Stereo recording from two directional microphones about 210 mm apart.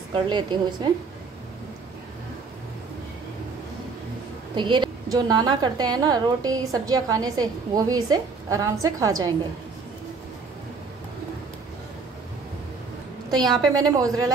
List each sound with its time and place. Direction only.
0.1 s a woman's voice: 20° right (ahead or behind)
4.6 s a woman's voice: 20° right (ahead or behind)
13.3 s a woman's voice: 20° right (ahead or behind)